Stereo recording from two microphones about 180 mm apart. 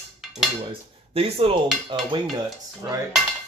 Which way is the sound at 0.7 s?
30° right (ahead or behind).